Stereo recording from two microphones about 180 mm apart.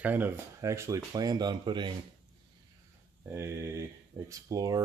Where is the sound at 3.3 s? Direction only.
15° right (ahead or behind).